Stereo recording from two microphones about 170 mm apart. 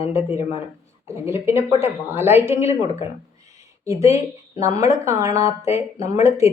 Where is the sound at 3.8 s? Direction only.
15° right (ahead or behind).